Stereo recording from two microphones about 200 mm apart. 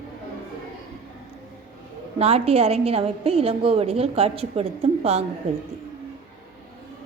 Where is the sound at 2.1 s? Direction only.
30° right (ahead or behind).